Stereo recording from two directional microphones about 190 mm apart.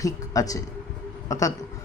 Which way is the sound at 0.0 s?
20° left (ahead or behind).